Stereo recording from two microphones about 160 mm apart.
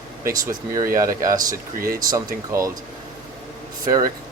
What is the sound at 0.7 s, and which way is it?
Speech, 20° right (ahead or behind).